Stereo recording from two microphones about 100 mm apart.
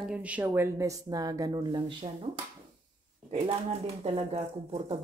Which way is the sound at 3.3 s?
80° right.